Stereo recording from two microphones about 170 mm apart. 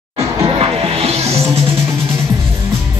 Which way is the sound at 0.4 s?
35° right (ahead or behind).